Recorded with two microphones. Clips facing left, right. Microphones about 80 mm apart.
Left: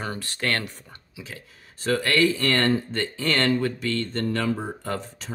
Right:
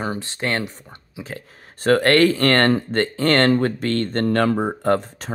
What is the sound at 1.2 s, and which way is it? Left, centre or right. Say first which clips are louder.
Speech: right 7 dB; right.